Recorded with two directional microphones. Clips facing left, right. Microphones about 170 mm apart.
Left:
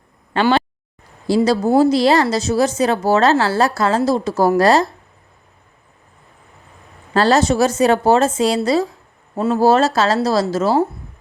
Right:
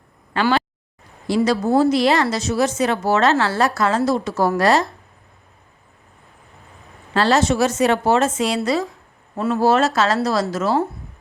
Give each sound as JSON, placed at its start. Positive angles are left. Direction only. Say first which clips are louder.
{"t": 0.3, "sound": "a woman's voice", "louder": "left 3 dB", "side_deg": 25}
{"t": 7.1, "sound": "a woman's voice", "louder": "left 3 dB", "side_deg": 40}